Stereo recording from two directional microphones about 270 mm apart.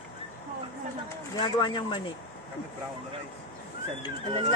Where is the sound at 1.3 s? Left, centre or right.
Centre.